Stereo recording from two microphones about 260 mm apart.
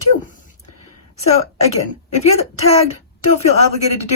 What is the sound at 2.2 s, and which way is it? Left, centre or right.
Speech, left.